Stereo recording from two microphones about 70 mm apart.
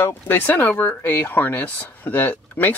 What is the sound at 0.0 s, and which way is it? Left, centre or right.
Speech, left.